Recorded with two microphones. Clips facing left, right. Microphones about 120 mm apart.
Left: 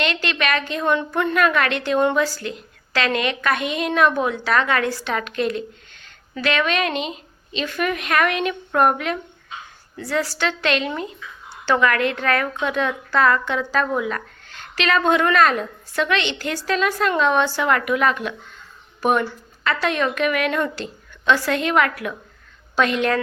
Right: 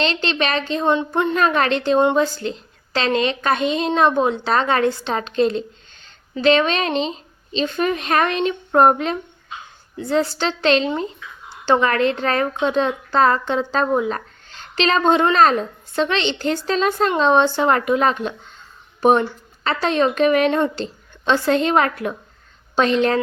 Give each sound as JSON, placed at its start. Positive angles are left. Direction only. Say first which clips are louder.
{"t": 0.0, "sound": "a woman's voice", "louder": "right 2 dB", "side_deg": -30}